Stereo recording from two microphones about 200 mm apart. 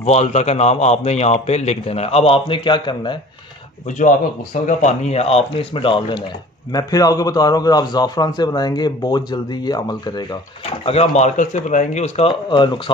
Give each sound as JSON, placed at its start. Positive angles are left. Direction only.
{"t": 0.0, "sound": "a man's voice", "side_deg": 35}
{"t": 4.6, "sound": "a man's voice", "side_deg": 35}
{"t": 10.9, "sound": "a man's voice", "side_deg": 30}